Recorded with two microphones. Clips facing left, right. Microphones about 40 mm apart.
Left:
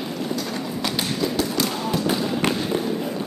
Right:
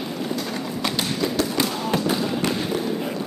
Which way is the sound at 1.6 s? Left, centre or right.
Right.